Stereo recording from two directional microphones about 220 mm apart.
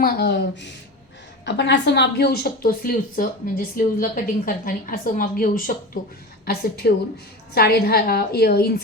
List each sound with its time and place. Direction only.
0.0 s a woman's voice: 45° left (ahead or behind)